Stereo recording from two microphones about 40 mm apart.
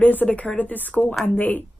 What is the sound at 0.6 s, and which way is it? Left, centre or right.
Speech, left.